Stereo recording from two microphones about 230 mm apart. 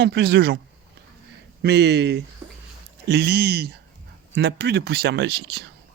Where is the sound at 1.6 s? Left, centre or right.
Right.